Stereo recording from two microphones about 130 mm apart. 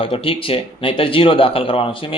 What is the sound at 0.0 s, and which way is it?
A man's voice, 45° left (ahead or behind).